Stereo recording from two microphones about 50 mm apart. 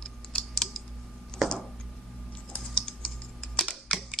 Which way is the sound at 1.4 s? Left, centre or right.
Centre.